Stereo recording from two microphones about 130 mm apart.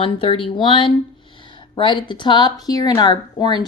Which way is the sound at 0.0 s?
45° left (ahead or behind).